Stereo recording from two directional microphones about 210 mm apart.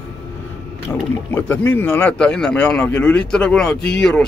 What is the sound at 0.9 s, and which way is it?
A man's voice, 10° left (ahead or behind).